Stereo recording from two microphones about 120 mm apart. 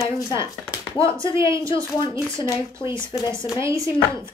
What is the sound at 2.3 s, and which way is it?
Speech, 40° left (ahead or behind).